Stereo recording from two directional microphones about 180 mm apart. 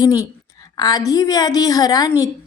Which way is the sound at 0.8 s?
20° left (ahead or behind).